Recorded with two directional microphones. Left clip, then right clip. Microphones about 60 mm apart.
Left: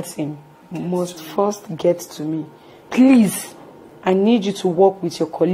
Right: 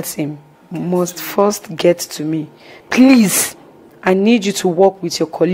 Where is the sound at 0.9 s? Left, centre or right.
Right.